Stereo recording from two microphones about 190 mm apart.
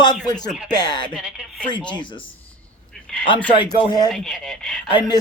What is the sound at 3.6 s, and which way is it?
Speech, 20° left (ahead or behind).